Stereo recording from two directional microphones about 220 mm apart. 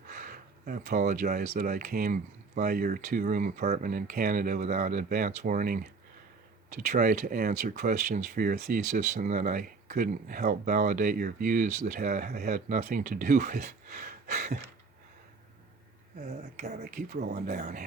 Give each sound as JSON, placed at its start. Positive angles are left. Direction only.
{"t": 0.1, "sound": "speech", "side_deg": -40}
{"t": 16.6, "sound": "speech", "side_deg": -35}